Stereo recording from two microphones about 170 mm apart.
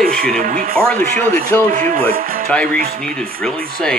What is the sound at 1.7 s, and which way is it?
Speech, 35° right (ahead or behind).